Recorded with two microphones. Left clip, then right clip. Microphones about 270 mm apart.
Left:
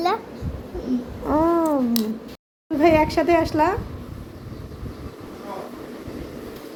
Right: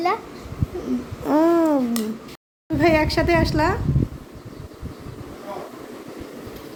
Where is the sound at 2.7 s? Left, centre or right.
Centre.